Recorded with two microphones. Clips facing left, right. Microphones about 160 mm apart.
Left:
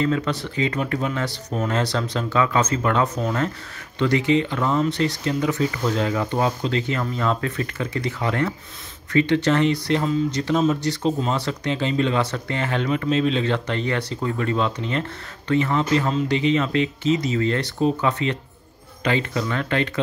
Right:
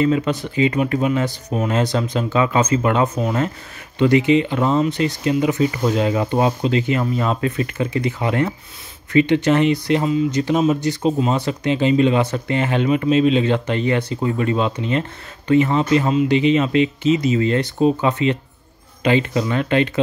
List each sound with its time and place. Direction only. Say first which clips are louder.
0.0 s speech: right 4 dB; 20° right (ahead or behind)